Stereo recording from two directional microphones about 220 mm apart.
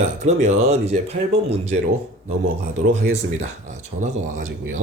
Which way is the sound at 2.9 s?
30° right (ahead or behind).